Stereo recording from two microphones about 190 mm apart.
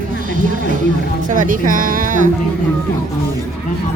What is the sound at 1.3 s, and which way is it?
Speech, 45° right (ahead or behind).